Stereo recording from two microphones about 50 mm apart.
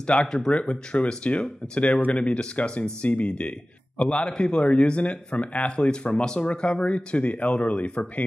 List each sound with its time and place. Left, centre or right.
0.0 s a man's voice: left